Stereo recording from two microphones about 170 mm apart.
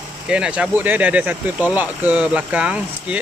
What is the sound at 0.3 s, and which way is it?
Speech, 5° right (ahead or behind).